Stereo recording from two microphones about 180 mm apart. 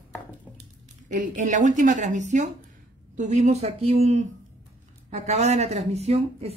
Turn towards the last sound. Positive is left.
turn(degrees=-35)  # may be behind; listen again after turning